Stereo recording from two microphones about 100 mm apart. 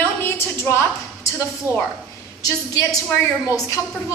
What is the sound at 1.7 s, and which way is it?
Speech, 25° right (ahead or behind).